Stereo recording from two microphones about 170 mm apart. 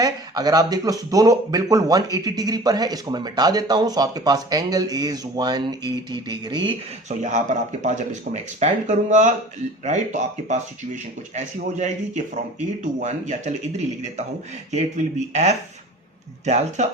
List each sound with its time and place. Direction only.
0.0 s speech: 20° right (ahead or behind)
7.1 s speech: 45° right (ahead or behind)